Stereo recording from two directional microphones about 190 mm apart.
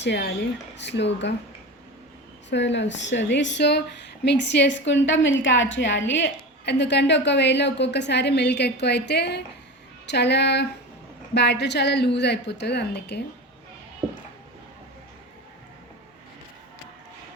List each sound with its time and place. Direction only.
0.0 s speech: 65° left (ahead or behind)
2.5 s speech: 70° left (ahead or behind)